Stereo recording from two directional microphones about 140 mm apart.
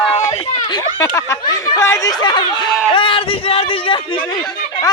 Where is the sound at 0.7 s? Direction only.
25° left (ahead or behind).